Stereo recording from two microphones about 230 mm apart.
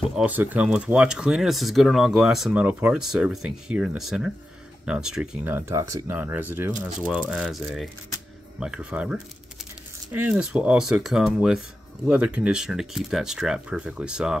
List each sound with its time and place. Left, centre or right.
0.1 s speech: centre